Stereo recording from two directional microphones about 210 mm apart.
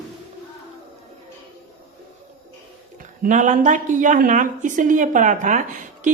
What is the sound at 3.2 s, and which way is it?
Speech, 35° right (ahead or behind).